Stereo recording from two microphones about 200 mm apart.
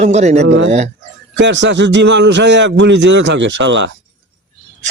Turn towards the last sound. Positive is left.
turn(degrees=-65)  # may be behind; listen again after turning